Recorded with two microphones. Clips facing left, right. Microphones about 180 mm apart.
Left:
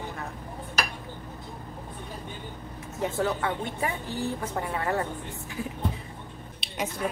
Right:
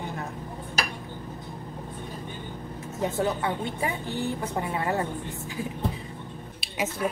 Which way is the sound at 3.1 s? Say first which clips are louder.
Even; 25° right (ahead or behind).